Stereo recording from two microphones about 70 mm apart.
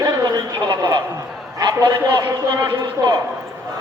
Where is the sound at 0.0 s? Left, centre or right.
Right.